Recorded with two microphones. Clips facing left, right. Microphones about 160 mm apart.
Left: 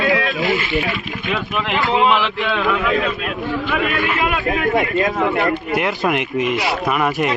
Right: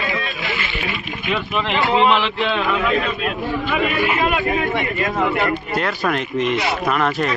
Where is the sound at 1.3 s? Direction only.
5° left (ahead or behind).